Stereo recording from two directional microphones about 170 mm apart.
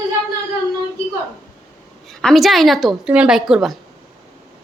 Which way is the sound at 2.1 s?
5° left (ahead or behind).